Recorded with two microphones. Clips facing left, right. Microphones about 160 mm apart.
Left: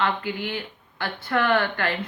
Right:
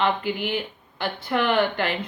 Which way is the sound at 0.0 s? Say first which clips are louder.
Right 2 dB; 15° right (ahead or behind).